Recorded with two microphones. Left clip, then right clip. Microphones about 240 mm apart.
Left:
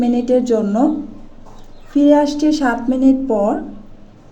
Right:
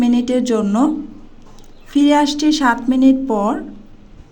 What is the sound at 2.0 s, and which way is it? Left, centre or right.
Speech, right.